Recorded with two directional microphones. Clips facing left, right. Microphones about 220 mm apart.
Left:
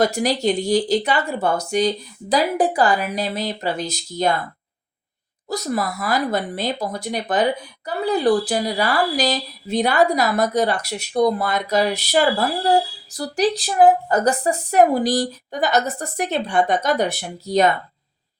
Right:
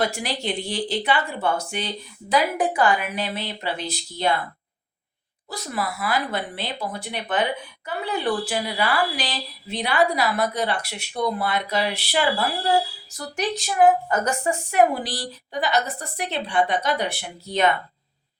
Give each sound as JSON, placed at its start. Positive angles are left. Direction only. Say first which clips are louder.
{"t": 0.0, "sound": "speech", "louder": "left 7 dB", "side_deg": 40}
{"t": 5.5, "sound": "speech", "louder": "left 6 dB", "side_deg": 40}